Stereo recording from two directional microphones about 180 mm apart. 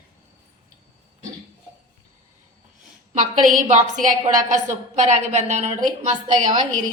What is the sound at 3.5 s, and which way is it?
A woman's voice, 45° right (ahead or behind).